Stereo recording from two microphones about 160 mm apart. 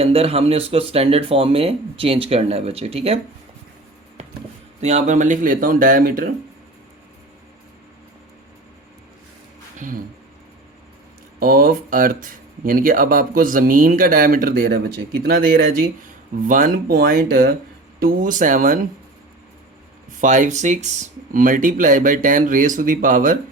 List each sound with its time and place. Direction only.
0.0 s speech: 40° right (ahead or behind)
4.8 s speech: 45° right (ahead or behind); by 6.3 s 60° right (ahead or behind)
9.7 s speech: 55° right (ahead or behind)
11.3 s speech: 65° right (ahead or behind)
20.2 s speech: 50° right (ahead or behind)